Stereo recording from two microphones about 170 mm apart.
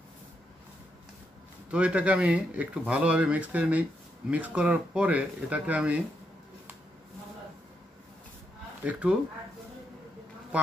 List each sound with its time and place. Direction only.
1.7 s speech: 5° right (ahead or behind)
8.8 s speech: 5° right (ahead or behind)